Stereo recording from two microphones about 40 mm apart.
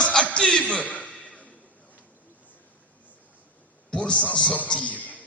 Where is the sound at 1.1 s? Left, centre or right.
Left.